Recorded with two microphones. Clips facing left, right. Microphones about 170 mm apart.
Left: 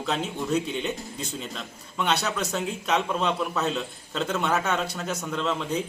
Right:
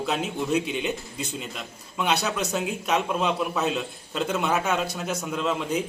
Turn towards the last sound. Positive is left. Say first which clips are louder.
# right 1 dB
turn(degrees=-10)  # may be behind; listen again after turning